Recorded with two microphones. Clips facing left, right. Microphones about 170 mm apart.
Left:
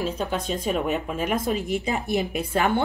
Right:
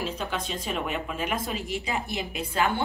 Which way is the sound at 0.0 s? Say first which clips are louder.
Left 4 dB; 40° left (ahead or behind).